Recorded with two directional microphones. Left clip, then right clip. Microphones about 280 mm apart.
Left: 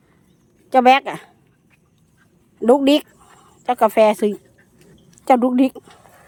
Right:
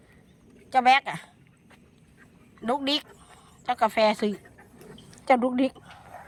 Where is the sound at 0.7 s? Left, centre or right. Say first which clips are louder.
Left 7 dB; centre.